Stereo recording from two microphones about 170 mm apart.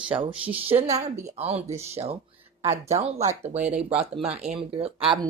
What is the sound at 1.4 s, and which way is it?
Speech, 35° right (ahead or behind).